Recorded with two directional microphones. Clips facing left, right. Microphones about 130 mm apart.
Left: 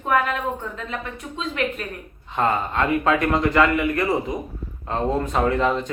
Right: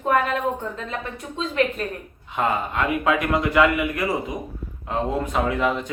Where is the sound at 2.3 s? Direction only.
10° right (ahead or behind).